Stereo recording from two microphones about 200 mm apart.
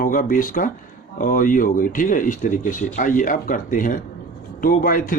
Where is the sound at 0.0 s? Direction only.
45° left (ahead or behind).